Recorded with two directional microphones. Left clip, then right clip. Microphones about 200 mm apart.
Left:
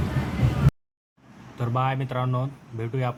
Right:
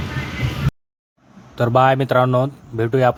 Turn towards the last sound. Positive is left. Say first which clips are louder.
# right 14 dB
turn(degrees=-50)  # may be behind; listen again after turning